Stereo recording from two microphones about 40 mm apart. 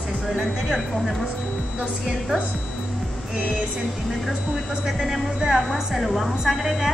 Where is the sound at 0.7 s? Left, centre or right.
Centre.